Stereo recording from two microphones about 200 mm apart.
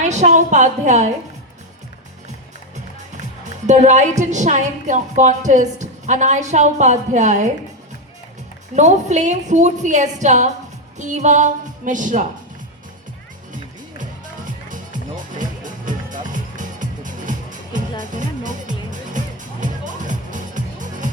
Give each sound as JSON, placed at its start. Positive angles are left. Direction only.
{"t": 0.0, "sound": "a woman's voice", "side_deg": -35}
{"t": 3.4, "sound": "a woman's voice", "side_deg": -35}
{"t": 8.7, "sound": "a woman's voice", "side_deg": -35}
{"t": 14.0, "sound": "music", "side_deg": -40}